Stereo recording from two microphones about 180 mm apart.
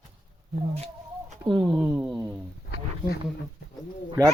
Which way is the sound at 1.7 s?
5° right (ahead or behind).